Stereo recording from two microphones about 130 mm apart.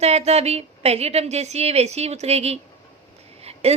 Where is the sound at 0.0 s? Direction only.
55° right (ahead or behind).